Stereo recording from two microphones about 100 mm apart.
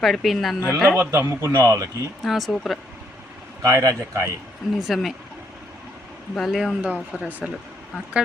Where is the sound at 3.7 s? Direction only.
30° right (ahead or behind).